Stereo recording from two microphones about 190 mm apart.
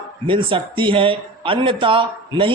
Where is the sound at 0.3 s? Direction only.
25° right (ahead or behind).